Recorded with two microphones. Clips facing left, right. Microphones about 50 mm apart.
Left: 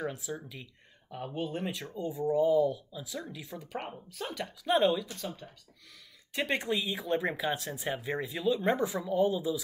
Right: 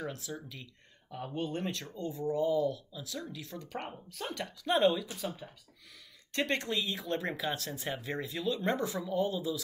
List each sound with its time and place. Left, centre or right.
0.0 s speech: centre
6.3 s speech: centre